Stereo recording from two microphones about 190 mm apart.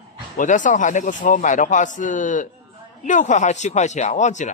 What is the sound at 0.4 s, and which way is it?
A man's voice, 40° left (ahead or behind).